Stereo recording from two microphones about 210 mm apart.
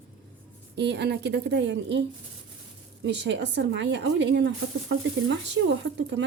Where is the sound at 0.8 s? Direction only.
55° right (ahead or behind).